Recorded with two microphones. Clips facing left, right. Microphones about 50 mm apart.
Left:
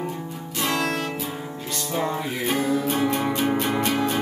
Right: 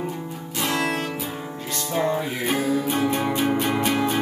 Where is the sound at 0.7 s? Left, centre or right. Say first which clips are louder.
Even; centre.